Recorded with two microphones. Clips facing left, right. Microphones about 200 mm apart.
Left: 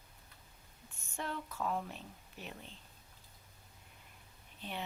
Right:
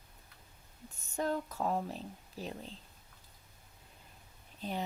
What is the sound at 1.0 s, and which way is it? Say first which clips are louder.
Speech: right 7 dB; 40° right (ahead or behind).